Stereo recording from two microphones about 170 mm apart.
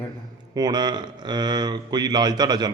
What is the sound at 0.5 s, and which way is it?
Speech, 25° right (ahead or behind).